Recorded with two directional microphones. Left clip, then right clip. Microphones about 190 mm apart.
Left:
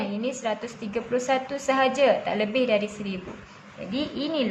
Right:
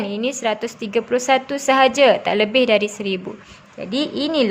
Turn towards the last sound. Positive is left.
turn(degrees=-60)  # may be behind; listen again after turning